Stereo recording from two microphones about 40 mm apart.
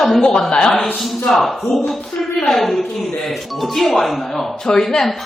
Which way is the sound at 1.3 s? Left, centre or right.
Centre.